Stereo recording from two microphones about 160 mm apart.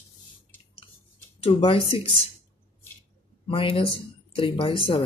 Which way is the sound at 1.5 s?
35° left (ahead or behind).